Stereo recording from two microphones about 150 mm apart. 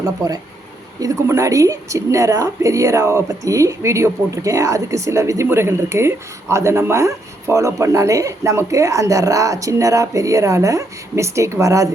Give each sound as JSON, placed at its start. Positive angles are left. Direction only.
{"t": 0.9, "sound": "a woman's voice", "side_deg": -20}